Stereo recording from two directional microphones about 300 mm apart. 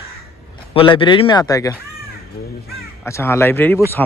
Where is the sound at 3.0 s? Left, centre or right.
Centre.